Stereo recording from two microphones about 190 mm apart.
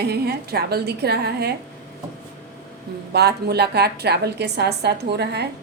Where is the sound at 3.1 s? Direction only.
60° right (ahead or behind).